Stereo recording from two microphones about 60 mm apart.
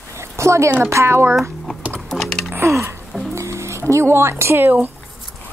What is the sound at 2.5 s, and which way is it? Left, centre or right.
Music, right.